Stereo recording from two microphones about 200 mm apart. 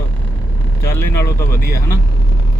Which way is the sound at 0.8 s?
10° left (ahead or behind).